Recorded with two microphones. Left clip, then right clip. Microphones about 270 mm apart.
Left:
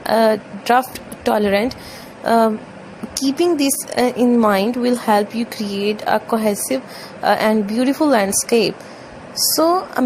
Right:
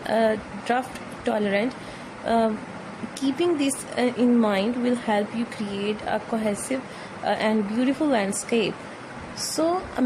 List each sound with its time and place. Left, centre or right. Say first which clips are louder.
0.0 s a woman's voice: left 7 dB; centre